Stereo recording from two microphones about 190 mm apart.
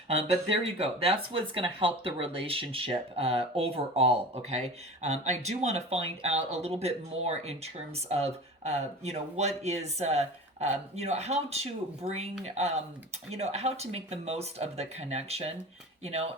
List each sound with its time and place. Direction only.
0.8 s speech: 30° right (ahead or behind)